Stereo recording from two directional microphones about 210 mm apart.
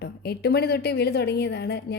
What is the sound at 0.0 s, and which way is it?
A woman's voice, 50° left (ahead or behind).